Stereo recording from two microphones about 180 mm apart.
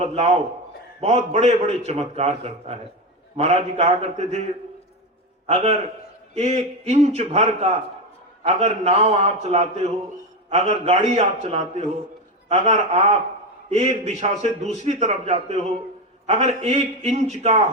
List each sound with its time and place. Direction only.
0.0 s a man's voice: 35° right (ahead or behind)
5.5 s a man's voice: 35° right (ahead or behind)
6.8 s a man's voice: 35° right (ahead or behind)